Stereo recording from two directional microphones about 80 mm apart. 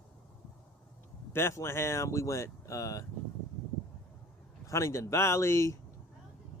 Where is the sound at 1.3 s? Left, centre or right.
Left.